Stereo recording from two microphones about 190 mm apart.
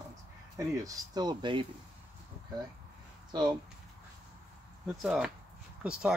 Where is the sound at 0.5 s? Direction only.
15° right (ahead or behind).